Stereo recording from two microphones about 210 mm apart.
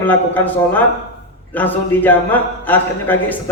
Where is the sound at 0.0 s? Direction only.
10° left (ahead or behind).